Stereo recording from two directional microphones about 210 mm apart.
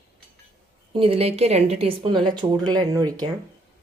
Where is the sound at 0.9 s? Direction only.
25° right (ahead or behind).